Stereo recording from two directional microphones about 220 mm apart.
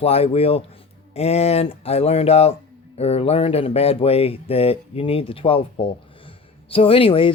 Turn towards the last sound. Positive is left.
turn(degrees=25)  # may be behind; listen again after turning